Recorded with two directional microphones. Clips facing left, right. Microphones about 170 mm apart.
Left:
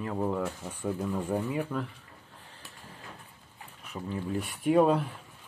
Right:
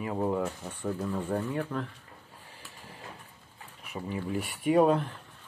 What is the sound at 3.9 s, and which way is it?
Speech, 10° right (ahead or behind).